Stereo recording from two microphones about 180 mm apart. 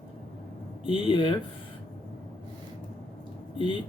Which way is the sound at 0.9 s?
30° left (ahead or behind).